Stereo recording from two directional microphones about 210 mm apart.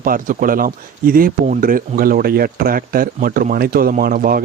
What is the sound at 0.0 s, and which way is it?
Speech, 40° right (ahead or behind).